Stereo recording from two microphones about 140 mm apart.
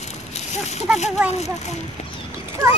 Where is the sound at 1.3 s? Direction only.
50° left (ahead or behind).